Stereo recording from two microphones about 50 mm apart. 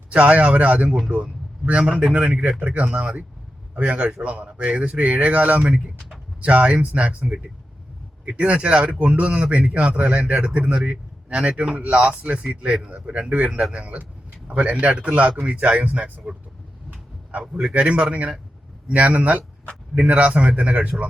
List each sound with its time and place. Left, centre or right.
0.1 s speech: right
0.9 s a man's voice: centre
1.1 s a man's voice: right
4.9 s speech: right
17.4 s a man's voice: centre
17.7 s speech: right